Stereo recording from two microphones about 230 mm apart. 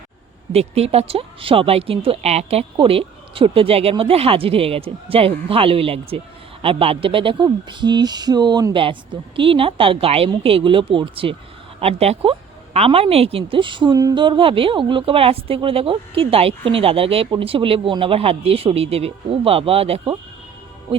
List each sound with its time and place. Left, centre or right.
0.5 s speech: right